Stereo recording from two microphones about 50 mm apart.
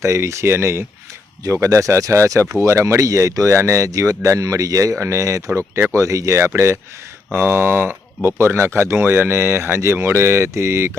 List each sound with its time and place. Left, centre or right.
0.0 s speech: right
1.6 s speech: right
2.5 s speech: right
7.3 s speech: right
8.4 s speech: right